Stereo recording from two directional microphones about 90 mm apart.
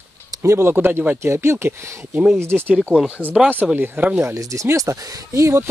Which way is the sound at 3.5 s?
20° right (ahead or behind).